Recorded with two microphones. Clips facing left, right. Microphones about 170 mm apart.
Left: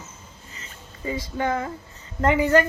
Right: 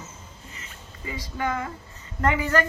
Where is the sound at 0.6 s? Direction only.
30° left (ahead or behind).